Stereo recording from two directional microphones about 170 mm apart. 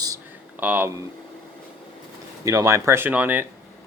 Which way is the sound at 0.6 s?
10° right (ahead or behind).